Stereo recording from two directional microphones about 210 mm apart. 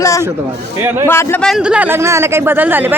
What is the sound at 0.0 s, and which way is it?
A man's voice, 15° left (ahead or behind).